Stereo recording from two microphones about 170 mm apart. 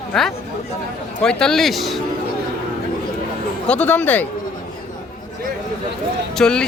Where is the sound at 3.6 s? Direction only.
5° left (ahead or behind).